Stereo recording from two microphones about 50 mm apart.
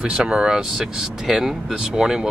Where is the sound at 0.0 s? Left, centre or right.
Centre.